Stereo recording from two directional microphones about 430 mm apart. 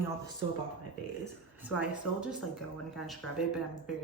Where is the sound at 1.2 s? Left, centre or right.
Centre.